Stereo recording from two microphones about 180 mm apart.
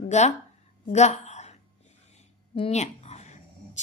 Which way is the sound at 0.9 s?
40° left (ahead or behind).